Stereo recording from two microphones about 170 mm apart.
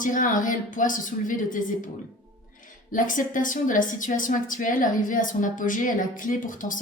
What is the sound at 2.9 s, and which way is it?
A woman's voice, 50° left (ahead or behind).